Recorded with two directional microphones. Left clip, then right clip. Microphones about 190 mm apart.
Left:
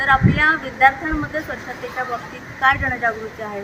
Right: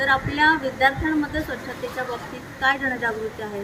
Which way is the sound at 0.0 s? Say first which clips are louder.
Left 3 dB; 10° right (ahead or behind).